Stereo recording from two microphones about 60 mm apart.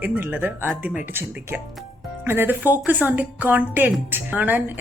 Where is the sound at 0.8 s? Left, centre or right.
Right.